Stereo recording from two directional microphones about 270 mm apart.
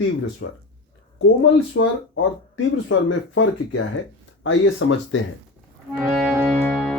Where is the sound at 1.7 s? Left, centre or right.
Left.